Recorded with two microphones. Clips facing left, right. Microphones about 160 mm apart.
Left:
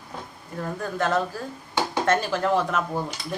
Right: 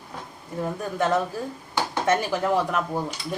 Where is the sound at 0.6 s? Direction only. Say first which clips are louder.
Right 1 dB; 15° right (ahead or behind).